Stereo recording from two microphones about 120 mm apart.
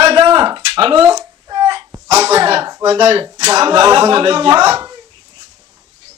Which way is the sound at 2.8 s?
50° right (ahead or behind).